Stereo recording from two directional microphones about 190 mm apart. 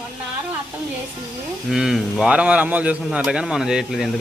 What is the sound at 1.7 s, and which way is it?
Speech, centre (ahead or behind).